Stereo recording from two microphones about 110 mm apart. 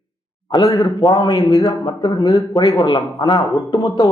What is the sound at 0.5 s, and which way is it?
A man's voice, 30° left (ahead or behind).